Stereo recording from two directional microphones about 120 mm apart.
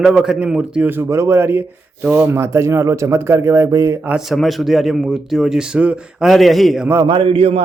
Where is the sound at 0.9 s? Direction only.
25° right (ahead or behind).